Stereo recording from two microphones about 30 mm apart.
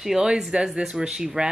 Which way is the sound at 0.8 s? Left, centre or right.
Right.